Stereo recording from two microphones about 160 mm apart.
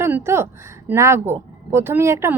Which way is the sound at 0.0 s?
15° right (ahead or behind).